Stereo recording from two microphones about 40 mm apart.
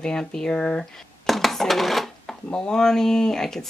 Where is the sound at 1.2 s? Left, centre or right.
Centre.